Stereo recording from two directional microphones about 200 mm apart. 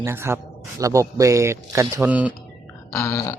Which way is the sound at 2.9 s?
15° left (ahead or behind).